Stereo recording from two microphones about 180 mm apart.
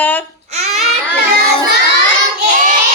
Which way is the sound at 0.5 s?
40° right (ahead or behind).